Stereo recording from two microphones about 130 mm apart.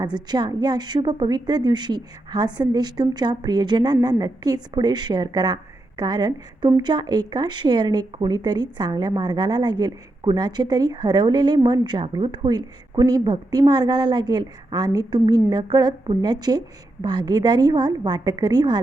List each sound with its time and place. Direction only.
0.3 s a woman's voice: 35° right (ahead or behind)